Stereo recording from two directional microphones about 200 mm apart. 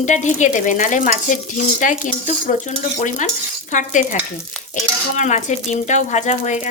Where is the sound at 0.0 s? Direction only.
35° left (ahead or behind).